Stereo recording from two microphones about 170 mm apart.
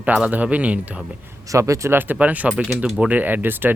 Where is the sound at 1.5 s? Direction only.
20° right (ahead or behind).